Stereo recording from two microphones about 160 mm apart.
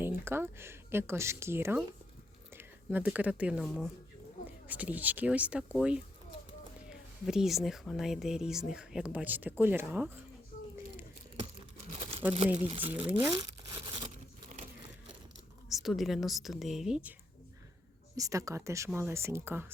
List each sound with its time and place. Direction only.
0.0 s speech: 15° right (ahead or behind)
10.5 s a sound: 55° left (ahead or behind)
12.5 s speech: 35° right (ahead or behind)
12.9 s speech: 10° right (ahead or behind)
13.3 s crumpling: 25° right (ahead or behind)
15.7 s speech: centre (ahead or behind)
18.2 s speech: 20° right (ahead or behind)